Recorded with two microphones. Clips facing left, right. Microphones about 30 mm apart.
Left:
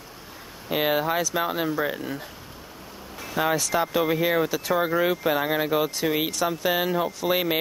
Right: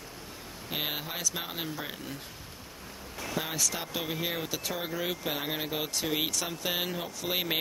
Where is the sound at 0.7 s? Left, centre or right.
Centre.